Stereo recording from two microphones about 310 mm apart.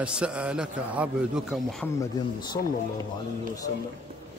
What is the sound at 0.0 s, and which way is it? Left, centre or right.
A man's voice, centre.